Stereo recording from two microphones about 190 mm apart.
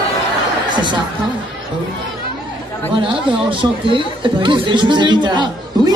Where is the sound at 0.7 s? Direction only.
25° right (ahead or behind).